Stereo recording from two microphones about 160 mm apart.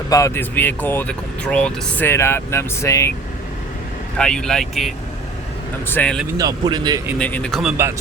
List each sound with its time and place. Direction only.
0.1 s speech: 20° left (ahead or behind)
4.2 s speech: 5° left (ahead or behind)
5.9 s speech: 10° left (ahead or behind)
6.3 s speech: 25° right (ahead or behind)
7.2 s speech: 10° left (ahead or behind)